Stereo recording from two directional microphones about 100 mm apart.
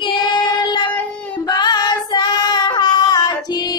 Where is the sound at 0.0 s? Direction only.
50° left (ahead or behind).